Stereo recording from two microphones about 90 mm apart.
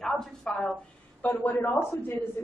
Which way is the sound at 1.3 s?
20° left (ahead or behind).